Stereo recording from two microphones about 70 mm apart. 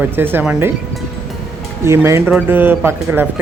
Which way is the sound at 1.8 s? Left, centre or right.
Right.